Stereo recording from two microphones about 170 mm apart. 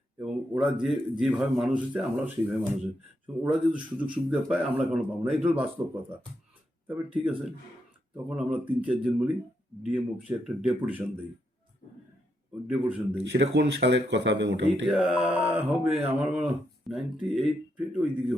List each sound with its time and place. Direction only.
0.2 s a man's voice: centre (ahead or behind)
6.8 s a man's voice: 5° right (ahead or behind)
12.6 s speech: 5° right (ahead or behind)
13.3 s speech: 80° right
14.8 s a man's voice: 5° right (ahead or behind)